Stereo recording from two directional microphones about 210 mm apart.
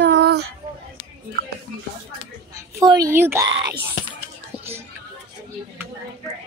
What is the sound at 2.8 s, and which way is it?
Speech, 15° right (ahead or behind).